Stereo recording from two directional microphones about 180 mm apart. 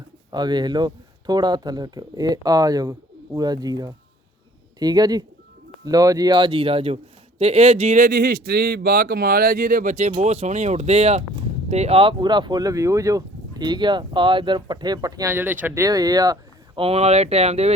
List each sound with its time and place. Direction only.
0.3 s a man's voice: 25° right (ahead or behind)
16.8 s speech: 35° right (ahead or behind)